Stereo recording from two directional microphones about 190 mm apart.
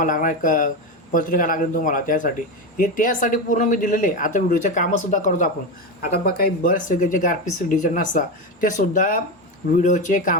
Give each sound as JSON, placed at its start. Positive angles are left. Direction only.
{"t": 0.0, "sound": "speech", "side_deg": 45}
{"t": 6.0, "sound": "speech", "side_deg": 55}